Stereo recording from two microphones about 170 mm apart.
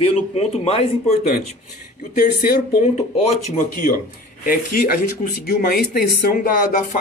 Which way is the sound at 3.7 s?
55° left (ahead or behind).